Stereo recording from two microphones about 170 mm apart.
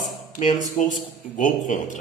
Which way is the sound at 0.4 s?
45° left (ahead or behind).